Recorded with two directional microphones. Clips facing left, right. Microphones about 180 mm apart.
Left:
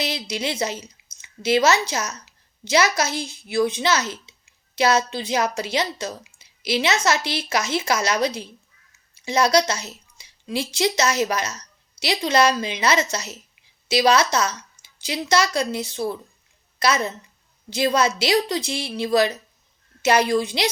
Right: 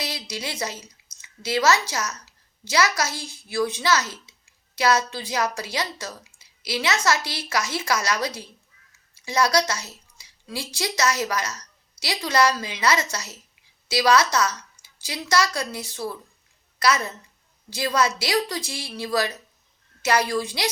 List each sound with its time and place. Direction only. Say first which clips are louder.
0.0 s a woman's voice: left 5 dB; 20° left (ahead or behind)